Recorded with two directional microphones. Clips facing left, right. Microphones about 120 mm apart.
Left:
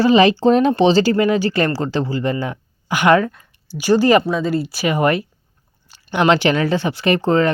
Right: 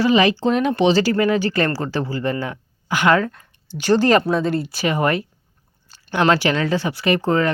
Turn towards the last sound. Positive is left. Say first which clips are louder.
# left 2 dB
turn(degrees=25)  # may be behind; listen again after turning